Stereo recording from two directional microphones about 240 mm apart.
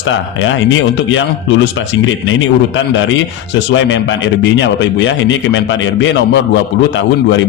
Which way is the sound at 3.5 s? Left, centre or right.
Left.